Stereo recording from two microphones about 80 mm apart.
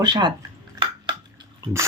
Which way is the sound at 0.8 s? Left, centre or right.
Right.